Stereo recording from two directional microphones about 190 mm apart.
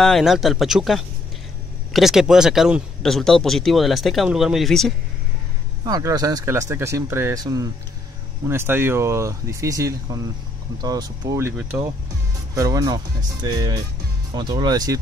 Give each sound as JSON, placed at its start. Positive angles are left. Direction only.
{"t": 0.0, "sound": "speech", "side_deg": 0}
{"t": 5.9, "sound": "speech", "side_deg": -20}